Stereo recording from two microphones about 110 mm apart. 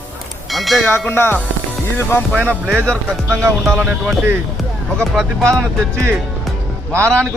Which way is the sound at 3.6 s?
Centre (ahead or behind).